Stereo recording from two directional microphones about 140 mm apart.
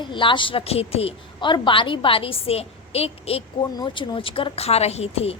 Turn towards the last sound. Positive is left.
turn(degrees=45)  # may be behind; listen again after turning